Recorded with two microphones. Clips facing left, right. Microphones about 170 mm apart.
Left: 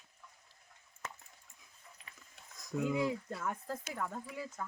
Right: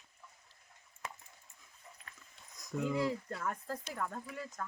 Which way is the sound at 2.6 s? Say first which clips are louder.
Left 1 dB; centre (ahead or behind).